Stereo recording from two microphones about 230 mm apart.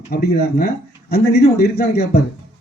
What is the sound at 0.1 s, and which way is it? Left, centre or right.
Speech, left.